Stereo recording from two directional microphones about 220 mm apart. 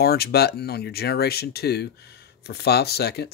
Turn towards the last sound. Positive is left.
turn(degrees=45)  # may be behind; listen again after turning